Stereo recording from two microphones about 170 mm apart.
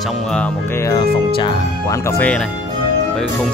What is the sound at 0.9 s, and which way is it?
Speech, 25° left (ahead or behind).